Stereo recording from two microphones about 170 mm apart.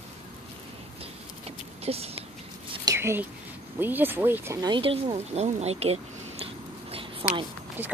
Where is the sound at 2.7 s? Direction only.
20° right (ahead or behind).